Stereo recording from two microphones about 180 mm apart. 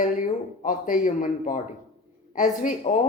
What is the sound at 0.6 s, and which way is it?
A woman's voice, 50° left (ahead or behind).